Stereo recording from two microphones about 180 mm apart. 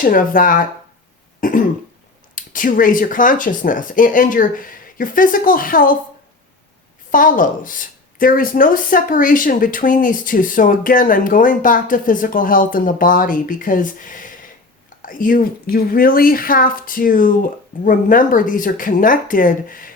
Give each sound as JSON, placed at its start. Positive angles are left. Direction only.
{"t": 0.0, "sound": "speech", "side_deg": 50}
{"t": 1.4, "sound": "cough", "side_deg": 50}
{"t": 2.3, "sound": "speech", "side_deg": 45}
{"t": 7.1, "sound": "speech", "side_deg": 50}